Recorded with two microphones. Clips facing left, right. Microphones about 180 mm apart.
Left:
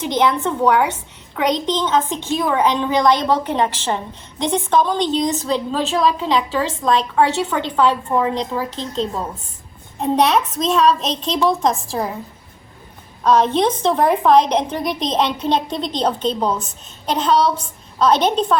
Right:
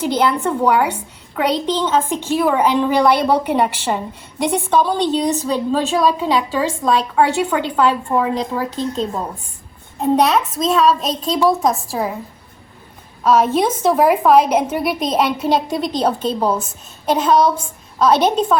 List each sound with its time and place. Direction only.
0.0 s a woman's voice: 10° right (ahead or behind)
10.0 s a child's voice: centre (ahead or behind)
13.2 s a woman's voice: 5° right (ahead or behind)